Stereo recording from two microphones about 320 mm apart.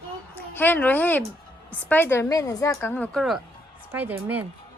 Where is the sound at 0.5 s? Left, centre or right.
Centre.